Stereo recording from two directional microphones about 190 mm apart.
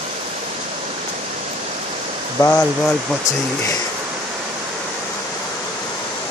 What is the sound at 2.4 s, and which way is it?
Speech, 10° left (ahead or behind).